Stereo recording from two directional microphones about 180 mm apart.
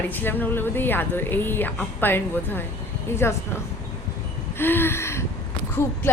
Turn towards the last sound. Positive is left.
turn(degrees=15)  # may be behind; listen again after turning